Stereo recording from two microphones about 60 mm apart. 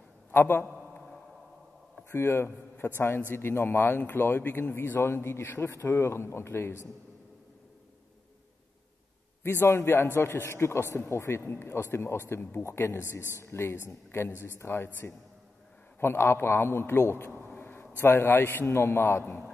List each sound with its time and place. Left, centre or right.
0.3 s a sound: left
2.0 s a man's voice: left
9.4 s a man's voice: left
12.4 s a man's voice: left
12.6 s a man's voice: left
17.3 s a man's voice: left
18.8 s a man's voice: left